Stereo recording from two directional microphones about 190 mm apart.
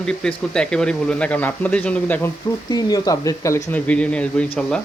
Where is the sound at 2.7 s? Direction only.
20° left (ahead or behind); by 4.8 s 5° left (ahead or behind).